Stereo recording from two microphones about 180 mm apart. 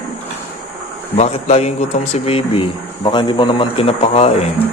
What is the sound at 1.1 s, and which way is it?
A man's voice, 35° left (ahead or behind).